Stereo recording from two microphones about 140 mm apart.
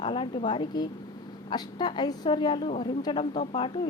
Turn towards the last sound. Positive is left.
turn(degrees=40)  # may be behind; listen again after turning